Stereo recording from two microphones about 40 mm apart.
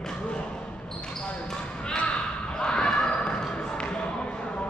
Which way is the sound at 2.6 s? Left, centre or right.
Left.